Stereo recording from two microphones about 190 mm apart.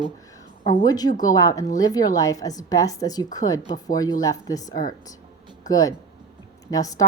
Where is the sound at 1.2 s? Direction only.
20° left (ahead or behind).